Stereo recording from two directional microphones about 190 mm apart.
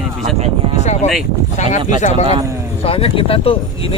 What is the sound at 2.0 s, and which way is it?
A man's voice, 35° left (ahead or behind).